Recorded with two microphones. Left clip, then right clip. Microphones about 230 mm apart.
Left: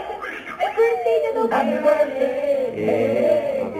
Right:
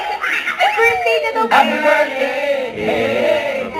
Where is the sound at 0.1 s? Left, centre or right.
Centre.